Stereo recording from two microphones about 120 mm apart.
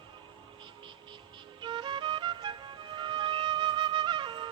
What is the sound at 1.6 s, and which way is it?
Music, 40° right (ahead or behind).